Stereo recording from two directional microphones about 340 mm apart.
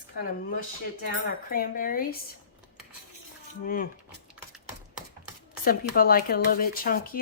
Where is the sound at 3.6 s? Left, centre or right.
Left.